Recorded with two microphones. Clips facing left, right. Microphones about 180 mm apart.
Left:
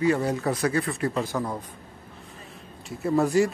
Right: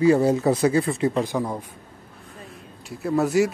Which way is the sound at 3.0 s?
Centre (ahead or behind).